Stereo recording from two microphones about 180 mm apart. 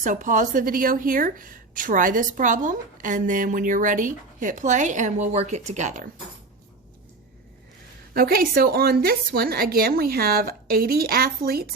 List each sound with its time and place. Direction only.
0.0 s a woman's voice: 45° right (ahead or behind)
8.1 s a woman's voice: 55° right (ahead or behind)